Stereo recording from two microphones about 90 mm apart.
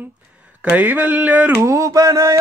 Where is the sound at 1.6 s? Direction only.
35° right (ahead or behind).